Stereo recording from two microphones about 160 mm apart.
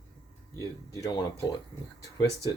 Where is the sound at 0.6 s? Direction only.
25° left (ahead or behind).